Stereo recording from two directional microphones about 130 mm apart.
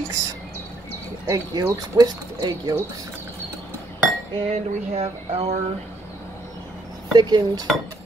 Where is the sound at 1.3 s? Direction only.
25° right (ahead or behind).